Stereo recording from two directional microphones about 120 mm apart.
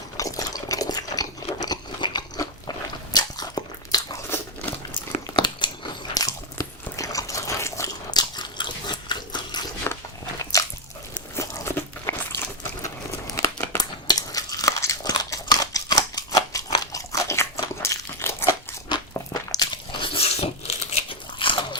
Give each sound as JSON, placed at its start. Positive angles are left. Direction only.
{"t": 0.2, "sound": "a sound", "side_deg": 30}
{"t": 5.2, "sound": "biting", "side_deg": 40}
{"t": 9.9, "sound": "biting", "side_deg": 20}
{"t": 11.3, "sound": "a sound", "side_deg": 25}
{"t": 15.1, "sound": "scissors", "side_deg": 35}
{"t": 16.7, "sound": "biting", "side_deg": 30}
{"t": 17.8, "sound": "crumpling", "side_deg": 20}
{"t": 18.9, "sound": "crunch", "side_deg": 35}
{"t": 20.2, "sound": "biting", "side_deg": 60}